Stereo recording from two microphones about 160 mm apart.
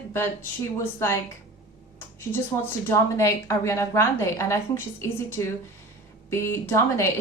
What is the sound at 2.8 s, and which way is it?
A woman's voice, 20° left (ahead or behind).